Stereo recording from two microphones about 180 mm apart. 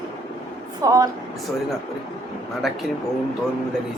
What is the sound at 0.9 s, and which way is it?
Speech, 20° right (ahead or behind).